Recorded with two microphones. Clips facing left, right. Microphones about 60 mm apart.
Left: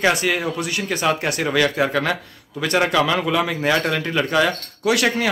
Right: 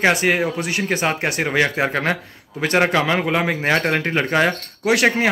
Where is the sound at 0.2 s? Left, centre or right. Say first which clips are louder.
Right 3 dB; right.